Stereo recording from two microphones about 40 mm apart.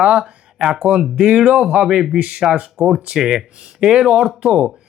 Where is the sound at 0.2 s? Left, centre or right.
Centre.